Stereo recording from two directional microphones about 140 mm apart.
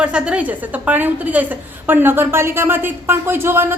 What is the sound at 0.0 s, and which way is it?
A woman's voice, 5° right (ahead or behind).